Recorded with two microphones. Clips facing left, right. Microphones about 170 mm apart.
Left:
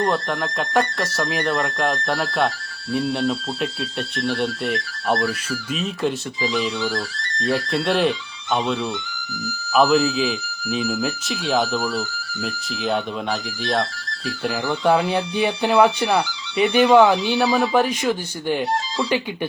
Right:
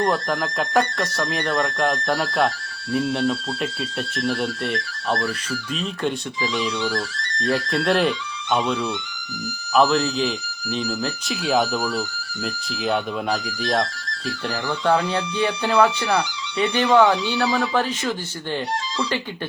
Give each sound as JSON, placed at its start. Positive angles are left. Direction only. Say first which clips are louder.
{"t": 0.1, "sound": "speech", "louder": "even", "side_deg": 0}
{"t": 15.0, "sound": "speech", "louder": "left 2 dB", "side_deg": 15}